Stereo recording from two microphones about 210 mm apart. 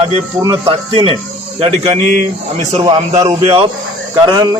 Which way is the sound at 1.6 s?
30° right (ahead or behind).